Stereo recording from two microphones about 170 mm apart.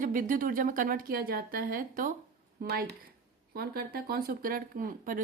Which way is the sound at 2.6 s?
65° right (ahead or behind).